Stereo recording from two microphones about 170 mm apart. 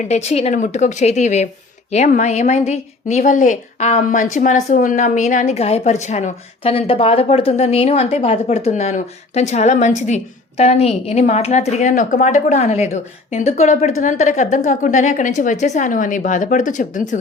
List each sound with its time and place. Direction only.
0.1 s a woman's voice: 40° left (ahead or behind)